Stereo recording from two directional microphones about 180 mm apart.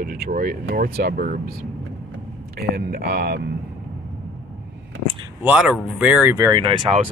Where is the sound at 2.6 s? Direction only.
60° right (ahead or behind).